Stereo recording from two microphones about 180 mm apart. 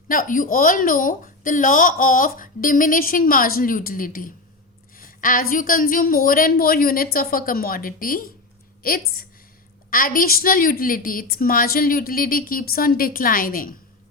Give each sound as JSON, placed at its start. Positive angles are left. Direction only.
{"t": 0.1, "sound": "speech", "side_deg": 50}